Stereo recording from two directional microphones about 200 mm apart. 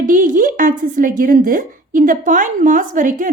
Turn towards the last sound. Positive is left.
turn(degrees=-40)  # may be behind; listen again after turning